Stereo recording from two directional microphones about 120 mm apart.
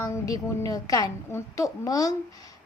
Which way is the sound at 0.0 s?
30° left (ahead or behind).